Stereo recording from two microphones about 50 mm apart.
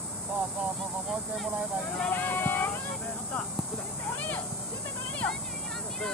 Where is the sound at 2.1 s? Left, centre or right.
Left.